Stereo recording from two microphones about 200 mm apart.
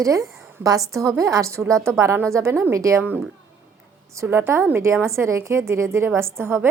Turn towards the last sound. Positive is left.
turn(degrees=-10)  # may be behind; listen again after turning